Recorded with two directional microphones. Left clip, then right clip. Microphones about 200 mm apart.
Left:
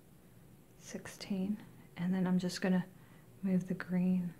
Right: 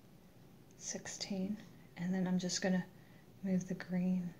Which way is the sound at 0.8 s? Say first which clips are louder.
Right 2 dB; 25° left (ahead or behind).